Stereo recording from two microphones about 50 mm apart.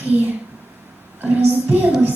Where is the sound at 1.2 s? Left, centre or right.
Right.